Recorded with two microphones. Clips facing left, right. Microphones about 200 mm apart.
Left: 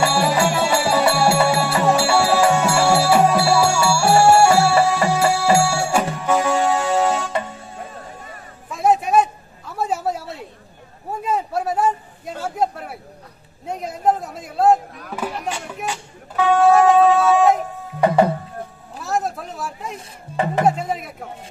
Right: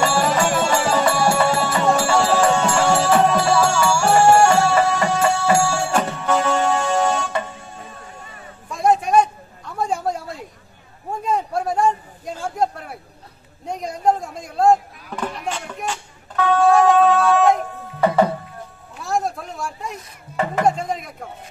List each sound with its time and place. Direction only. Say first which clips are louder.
0.0 s music: left 1 dB; 10° left (ahead or behind)
8.6 s a sound: even; 5° left (ahead or behind)
15.1 s music: even; 5° left (ahead or behind)
18.9 s a sound: even; centre (ahead or behind)
20.3 s music: left 1 dB; 30° left (ahead or behind)
20.6 s music: left 1 dB; 5° left (ahead or behind)